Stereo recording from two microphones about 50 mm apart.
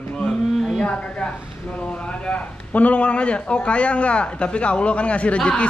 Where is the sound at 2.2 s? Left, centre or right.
Left.